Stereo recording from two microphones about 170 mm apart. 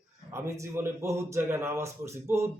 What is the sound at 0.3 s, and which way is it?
A man's voice, 15° right (ahead or behind).